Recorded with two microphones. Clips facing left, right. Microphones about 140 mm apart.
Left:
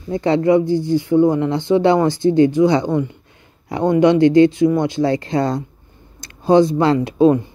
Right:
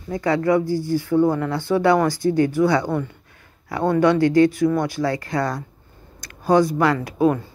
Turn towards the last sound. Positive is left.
turn(degrees=25)  # may be behind; listen again after turning